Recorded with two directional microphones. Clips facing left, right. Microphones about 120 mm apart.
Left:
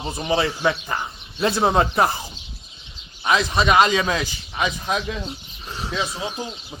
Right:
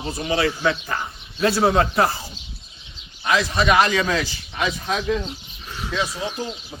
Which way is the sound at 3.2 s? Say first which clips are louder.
Even; 20° left (ahead or behind).